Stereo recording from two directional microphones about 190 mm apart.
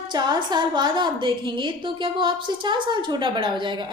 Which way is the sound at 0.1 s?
25° right (ahead or behind).